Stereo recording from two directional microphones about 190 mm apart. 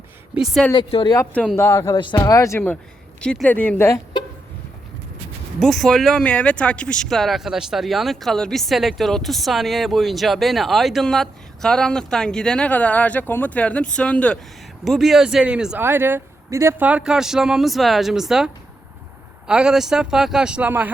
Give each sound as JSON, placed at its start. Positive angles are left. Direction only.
{"t": 0.3, "sound": "speech", "side_deg": 0}
{"t": 0.7, "sound": "speech", "side_deg": 25}
{"t": 1.1, "sound": "speech", "side_deg": 10}
{"t": 5.5, "sound": "speech", "side_deg": 0}